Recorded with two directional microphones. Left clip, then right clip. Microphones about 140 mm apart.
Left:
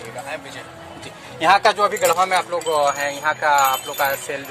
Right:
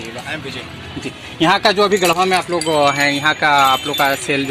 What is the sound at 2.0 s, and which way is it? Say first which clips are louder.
Wind chime: right 2 dB; 25° right (ahead or behind).